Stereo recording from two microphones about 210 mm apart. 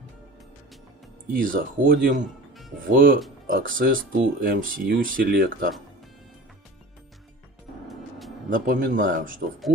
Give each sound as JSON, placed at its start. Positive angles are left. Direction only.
{"t": 1.3, "sound": "speech", "side_deg": -40}
{"t": 8.5, "sound": "speech", "side_deg": -40}